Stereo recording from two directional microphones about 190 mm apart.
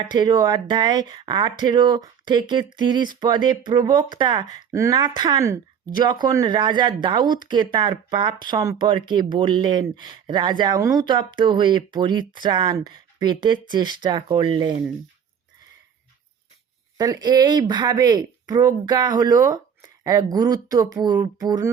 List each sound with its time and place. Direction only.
0.1 s speech: 20° right (ahead or behind)
17.0 s speech: 20° right (ahead or behind)